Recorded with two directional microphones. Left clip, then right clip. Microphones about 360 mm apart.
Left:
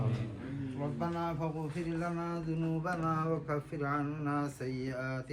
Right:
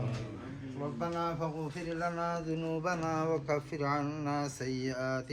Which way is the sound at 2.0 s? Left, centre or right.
Centre.